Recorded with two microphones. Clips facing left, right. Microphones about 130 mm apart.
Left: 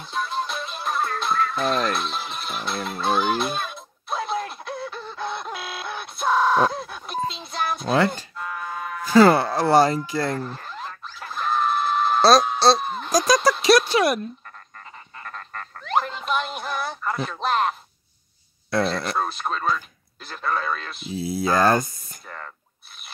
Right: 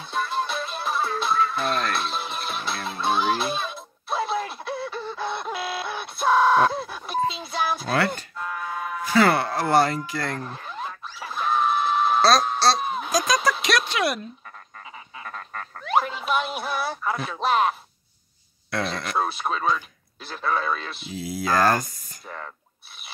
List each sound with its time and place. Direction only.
0.0 s music: centre (ahead or behind)
9.1 s music: 35° left (ahead or behind)
9.7 s speech: 30° left (ahead or behind)
10.5 s a sound: 5° right (ahead or behind)
13.3 s a sound: 35° left (ahead or behind)
15.1 s music: 5° right (ahead or behind)
18.8 s speech: centre (ahead or behind)
21.1 s speech: 30° left (ahead or behind)
22.2 s a sound: 5° right (ahead or behind)